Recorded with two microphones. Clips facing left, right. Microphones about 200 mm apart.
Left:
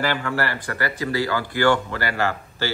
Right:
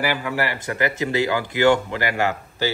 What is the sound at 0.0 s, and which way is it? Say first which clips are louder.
Speech: even; 10° right (ahead or behind).